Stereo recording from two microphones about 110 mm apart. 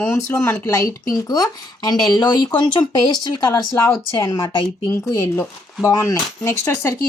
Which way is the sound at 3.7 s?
25° left (ahead or behind).